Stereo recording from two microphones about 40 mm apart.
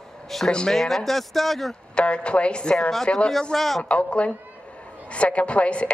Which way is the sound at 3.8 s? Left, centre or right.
Left.